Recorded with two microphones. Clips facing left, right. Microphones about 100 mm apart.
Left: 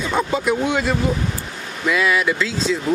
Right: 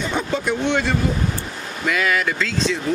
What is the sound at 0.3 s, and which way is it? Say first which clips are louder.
Speech: left 1 dB; 5° left (ahead or behind).